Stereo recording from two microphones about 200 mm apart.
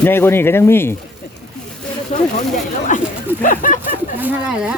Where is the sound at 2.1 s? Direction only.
35° left (ahead or behind).